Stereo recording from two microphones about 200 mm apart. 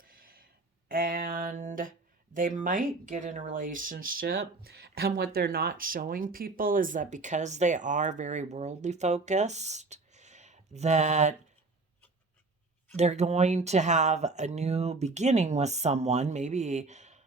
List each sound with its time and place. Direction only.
0.0 s a sound: 45° right (ahead or behind)
2.3 s speech: 40° right (ahead or behind)
13.0 s speech: 35° right (ahead or behind)